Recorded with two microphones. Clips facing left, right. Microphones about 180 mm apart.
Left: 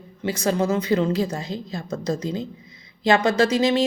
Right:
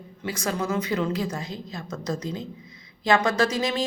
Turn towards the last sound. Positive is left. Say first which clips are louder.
# left 6 dB
turn(degrees=25)  # may be behind; listen again after turning